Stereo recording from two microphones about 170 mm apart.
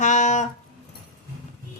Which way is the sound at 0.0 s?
45° left (ahead or behind).